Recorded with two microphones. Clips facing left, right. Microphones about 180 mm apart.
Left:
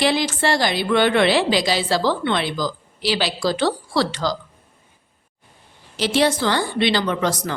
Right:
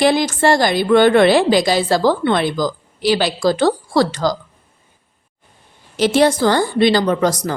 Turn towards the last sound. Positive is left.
turn(degrees=-45)  # may be behind; listen again after turning